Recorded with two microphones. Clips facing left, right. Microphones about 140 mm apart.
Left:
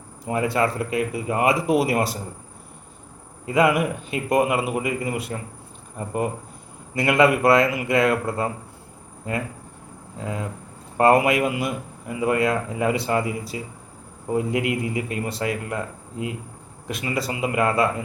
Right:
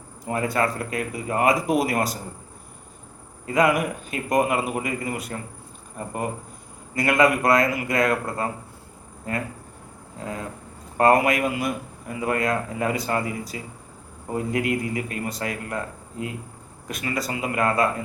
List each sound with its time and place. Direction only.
0.3 s a man's voice: 25° left (ahead or behind)
3.4 s a man's voice: 25° left (ahead or behind)
6.9 s a man's voice: 25° left (ahead or behind)
10.9 s a man's voice: 25° left (ahead or behind)